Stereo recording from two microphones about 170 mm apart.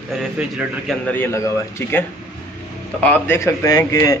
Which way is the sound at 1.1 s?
15° left (ahead or behind).